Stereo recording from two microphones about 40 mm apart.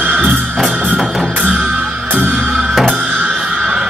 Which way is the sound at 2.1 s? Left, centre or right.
Right.